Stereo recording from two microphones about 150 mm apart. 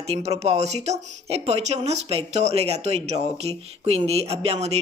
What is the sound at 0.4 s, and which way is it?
Speech, 45° right (ahead or behind).